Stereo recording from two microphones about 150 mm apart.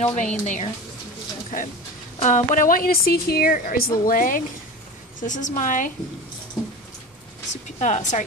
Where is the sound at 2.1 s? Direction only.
55° left (ahead or behind).